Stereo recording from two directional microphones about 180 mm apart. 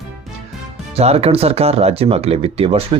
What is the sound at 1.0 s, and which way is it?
Speech, 35° right (ahead or behind).